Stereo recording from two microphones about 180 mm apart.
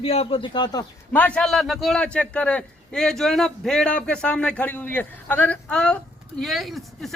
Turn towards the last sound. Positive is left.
turn(degrees=0)  # may be behind; listen again after turning